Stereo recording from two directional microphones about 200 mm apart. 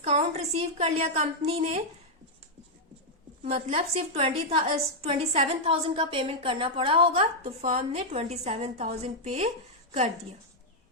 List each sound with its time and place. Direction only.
0.0 s a woman's voice: 35° right (ahead or behind)
3.4 s a woman's voice: 30° right (ahead or behind)